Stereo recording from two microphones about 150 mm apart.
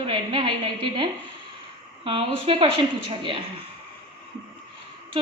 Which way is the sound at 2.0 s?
35° right (ahead or behind).